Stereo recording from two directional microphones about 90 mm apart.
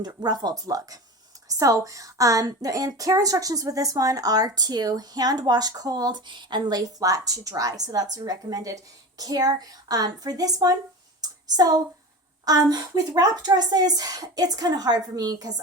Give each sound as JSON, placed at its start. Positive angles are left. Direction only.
{"t": 0.0, "sound": "a woman's voice", "side_deg": -50}
{"t": 11.2, "sound": "a sound", "side_deg": -45}
{"t": 12.5, "sound": "a woman's voice", "side_deg": -40}